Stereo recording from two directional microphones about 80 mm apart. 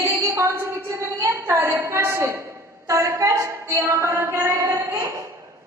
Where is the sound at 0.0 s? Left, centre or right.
Right.